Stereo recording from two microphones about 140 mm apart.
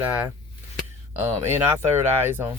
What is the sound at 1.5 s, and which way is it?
Speech, 15° right (ahead or behind).